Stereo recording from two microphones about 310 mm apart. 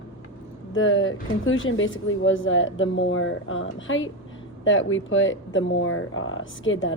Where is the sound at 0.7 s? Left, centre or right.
Left.